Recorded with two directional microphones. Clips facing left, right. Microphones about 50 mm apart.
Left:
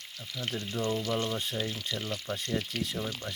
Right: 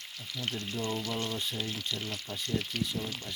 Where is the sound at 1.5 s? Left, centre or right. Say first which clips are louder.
Left 2 dB; left.